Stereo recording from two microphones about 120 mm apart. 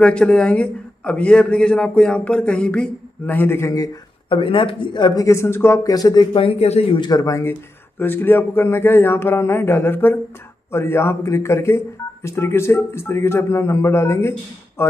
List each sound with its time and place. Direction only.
0.0 s a man's voice: 10° left (ahead or behind); by 3.9 s 25° left (ahead or behind)
4.3 s speech: 45° left (ahead or behind)
5.2 s speech: 25° left (ahead or behind)
6.3 s speech: 55° left (ahead or behind)
7.0 s speech: 30° left (ahead or behind)